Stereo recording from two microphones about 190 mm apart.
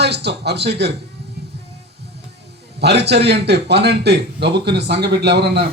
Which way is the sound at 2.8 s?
60° right (ahead or behind).